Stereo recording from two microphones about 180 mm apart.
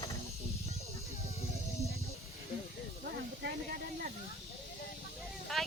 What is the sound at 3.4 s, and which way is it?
Snake, 60° right (ahead or behind).